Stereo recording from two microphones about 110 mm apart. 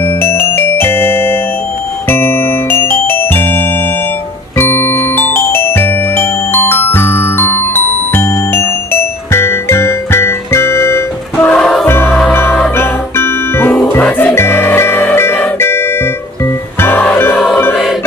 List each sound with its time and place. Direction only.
0.0 s music: 20° left (ahead or behind)
11.4 s music: 5° left (ahead or behind)
11.8 s music: 20° left (ahead or behind)